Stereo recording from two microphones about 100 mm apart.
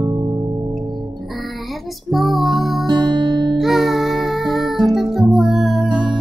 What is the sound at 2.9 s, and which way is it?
Music, 45° right (ahead or behind).